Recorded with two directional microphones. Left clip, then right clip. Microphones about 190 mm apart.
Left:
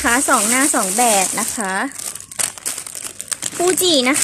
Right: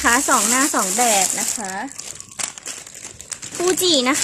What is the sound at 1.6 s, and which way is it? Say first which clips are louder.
Speech: left 7 dB; 30° left (ahead or behind).